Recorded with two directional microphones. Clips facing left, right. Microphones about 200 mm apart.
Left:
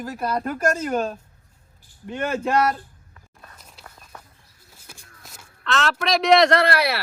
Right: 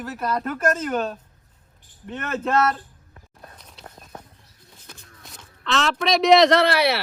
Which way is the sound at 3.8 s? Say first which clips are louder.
Right 4 dB; 25° right (ahead or behind).